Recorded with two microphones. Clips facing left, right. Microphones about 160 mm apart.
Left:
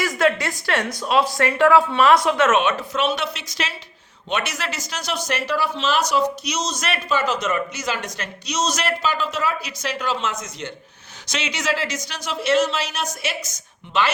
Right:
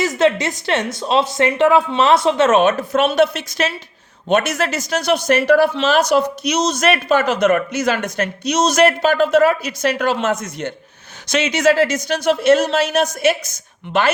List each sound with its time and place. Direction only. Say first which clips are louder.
0.2 s a man's voice: right 3 dB; 25° right (ahead or behind); by 14.1 s 55° right (ahead or behind)